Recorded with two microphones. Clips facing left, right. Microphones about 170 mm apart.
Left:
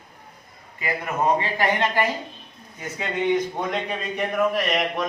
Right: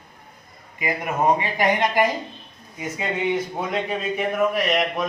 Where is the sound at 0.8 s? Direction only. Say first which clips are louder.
Right 2 dB; 15° right (ahead or behind).